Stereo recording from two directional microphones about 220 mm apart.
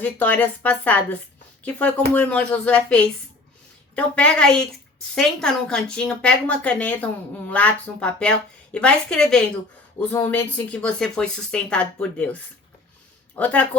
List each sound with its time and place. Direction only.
0.0 s a woman's voice: 5° left (ahead or behind)